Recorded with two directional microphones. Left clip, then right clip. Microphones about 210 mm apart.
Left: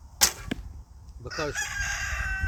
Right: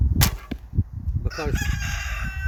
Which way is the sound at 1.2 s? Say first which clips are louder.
Right 1 dB; 50° right (ahead or behind).